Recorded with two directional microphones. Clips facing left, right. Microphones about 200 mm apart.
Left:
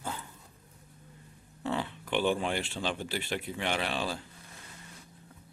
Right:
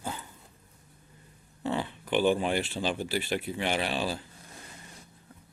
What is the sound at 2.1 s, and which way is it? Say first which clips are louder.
Speech: right 4 dB; 5° right (ahead or behind).